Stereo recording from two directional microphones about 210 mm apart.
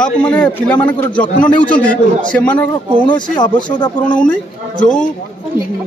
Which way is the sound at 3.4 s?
20° left (ahead or behind).